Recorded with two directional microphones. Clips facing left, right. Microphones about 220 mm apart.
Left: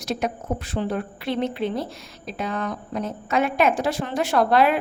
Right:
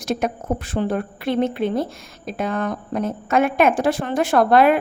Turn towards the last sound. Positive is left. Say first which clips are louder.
# right 4 dB
turn(degrees=-50)  # may be behind; listen again after turning